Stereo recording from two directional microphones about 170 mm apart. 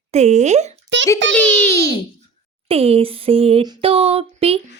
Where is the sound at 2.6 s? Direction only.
35° right (ahead or behind).